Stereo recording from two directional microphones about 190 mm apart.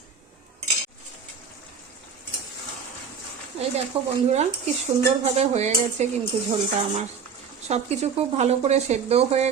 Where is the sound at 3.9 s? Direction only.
30° right (ahead or behind).